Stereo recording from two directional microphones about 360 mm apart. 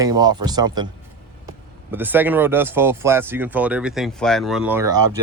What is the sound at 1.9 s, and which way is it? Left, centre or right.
Speech, centre.